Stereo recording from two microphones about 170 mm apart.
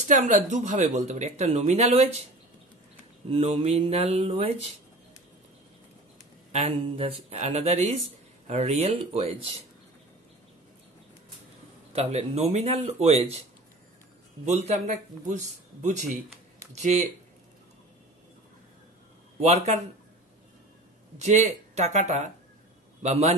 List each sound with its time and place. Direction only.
0.0 s speech: 45° right (ahead or behind)
3.3 s a man's voice: 35° right (ahead or behind)
6.5 s a man's voice: 35° right (ahead or behind)
11.9 s a man's voice: 40° right (ahead or behind)
14.5 s speech: 40° right (ahead or behind)
19.4 s a man's voice: 40° right (ahead or behind)
21.2 s a man's voice: 40° right (ahead or behind)